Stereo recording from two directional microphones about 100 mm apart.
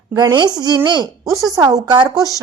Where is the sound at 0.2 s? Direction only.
45° right (ahead or behind).